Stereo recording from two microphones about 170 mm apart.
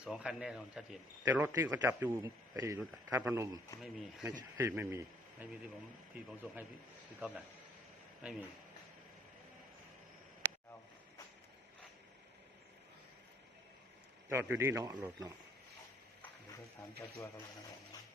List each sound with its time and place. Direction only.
0.0 s a man's voice: 5° right (ahead or behind)
3.8 s a man's voice: centre (ahead or behind)
4.5 s a man's voice: 15° right (ahead or behind)
14.3 s a man's voice: 10° right (ahead or behind)
17.0 s speech: 15° left (ahead or behind)